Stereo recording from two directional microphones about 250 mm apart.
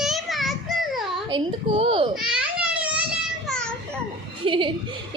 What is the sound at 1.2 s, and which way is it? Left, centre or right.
Speech, right.